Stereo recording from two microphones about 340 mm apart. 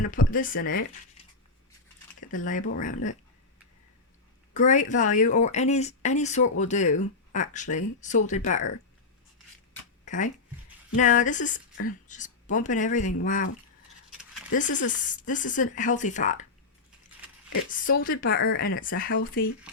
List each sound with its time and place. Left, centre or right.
0.3 s speech: left
2.3 s speech: left
4.5 s speech: left
10.1 s speech: left
14.5 s speech: left
17.7 s speech: left